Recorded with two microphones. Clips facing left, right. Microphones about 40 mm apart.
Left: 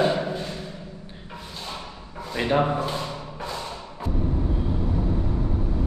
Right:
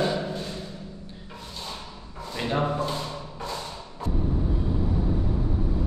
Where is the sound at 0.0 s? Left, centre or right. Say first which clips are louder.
Left 4 dB; left.